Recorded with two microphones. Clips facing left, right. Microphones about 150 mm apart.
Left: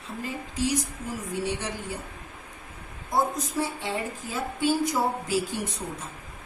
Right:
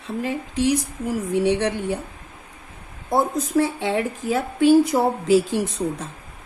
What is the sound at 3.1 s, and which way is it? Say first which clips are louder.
A woman's voice: right 6 dB; 60° right (ahead or behind).